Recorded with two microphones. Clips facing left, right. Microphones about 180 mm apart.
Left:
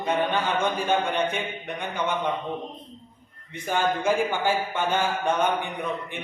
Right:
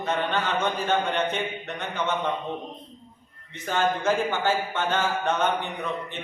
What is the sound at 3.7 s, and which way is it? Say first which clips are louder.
A man's voice: even; 10° left (ahead or behind).